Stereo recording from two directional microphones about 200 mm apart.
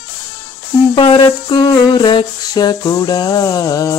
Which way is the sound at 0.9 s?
25° left (ahead or behind).